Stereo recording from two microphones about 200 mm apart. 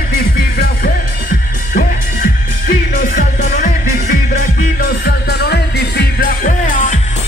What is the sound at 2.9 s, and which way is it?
Music, 45° left (ahead or behind).